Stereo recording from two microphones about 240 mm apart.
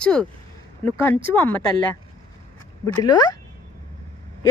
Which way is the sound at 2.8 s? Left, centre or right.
Centre.